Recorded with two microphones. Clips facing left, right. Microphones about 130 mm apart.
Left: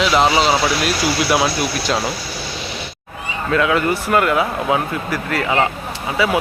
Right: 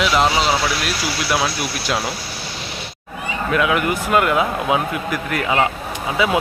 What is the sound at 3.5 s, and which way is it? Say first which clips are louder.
Speech: left 2 dB; 15° right (ahead or behind).